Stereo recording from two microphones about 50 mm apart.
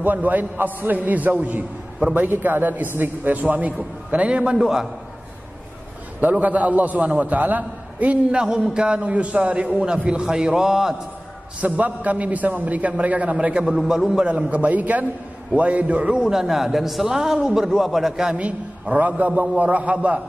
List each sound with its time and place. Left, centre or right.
0.0 s a man's voice: right
2.1 s a man's voice: right
4.6 s a man's voice: centre
6.4 s a man's voice: right
8.4 s a man's voice: centre
11.6 s a man's voice: right
13.7 s a man's voice: centre
14.3 s a man's voice: right
16.2 s a man's voice: centre
18.4 s a man's voice: right